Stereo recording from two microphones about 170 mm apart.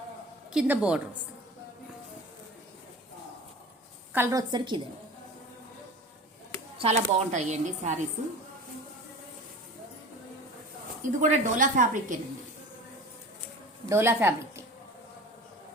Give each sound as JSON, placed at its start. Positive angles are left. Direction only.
{"t": 0.5, "sound": "a woman's voice", "side_deg": -5}
{"t": 4.1, "sound": "a woman's voice", "side_deg": -15}
{"t": 6.7, "sound": "speech", "side_deg": -40}
{"t": 11.2, "sound": "speech", "side_deg": -50}
{"t": 13.8, "sound": "a woman's voice", "side_deg": -15}